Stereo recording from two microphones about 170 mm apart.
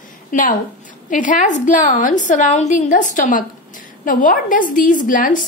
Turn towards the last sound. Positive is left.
turn(degrees=50)  # may be behind; listen again after turning